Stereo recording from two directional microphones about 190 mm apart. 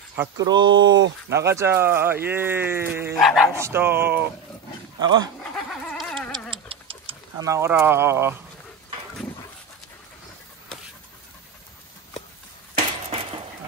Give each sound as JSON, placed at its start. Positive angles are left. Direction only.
{"t": 0.1, "sound": "speech", "side_deg": -15}
{"t": 3.2, "sound": "speech", "side_deg": 0}
{"t": 3.5, "sound": "speech", "side_deg": -15}
{"t": 5.0, "sound": "speech", "side_deg": -20}
{"t": 5.4, "sound": "a sound", "side_deg": 0}
{"t": 6.5, "sound": "a sound", "side_deg": -30}
{"t": 7.4, "sound": "speech", "side_deg": -15}